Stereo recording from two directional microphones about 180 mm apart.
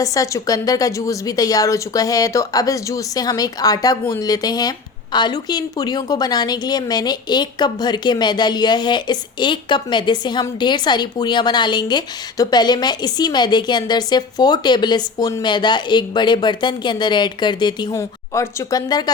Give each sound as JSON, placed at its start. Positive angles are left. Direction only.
{"t": 0.0, "sound": "a woman's voice", "side_deg": 20}